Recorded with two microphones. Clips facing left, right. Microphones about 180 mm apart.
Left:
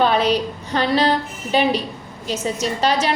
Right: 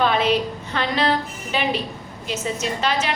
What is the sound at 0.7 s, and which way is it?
A woman's voice, 35° left (ahead or behind).